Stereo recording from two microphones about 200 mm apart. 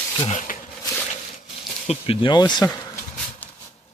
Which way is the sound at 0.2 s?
35° left (ahead or behind).